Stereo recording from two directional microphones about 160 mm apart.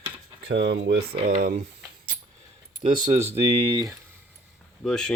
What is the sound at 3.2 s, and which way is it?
Speech, 40° right (ahead or behind).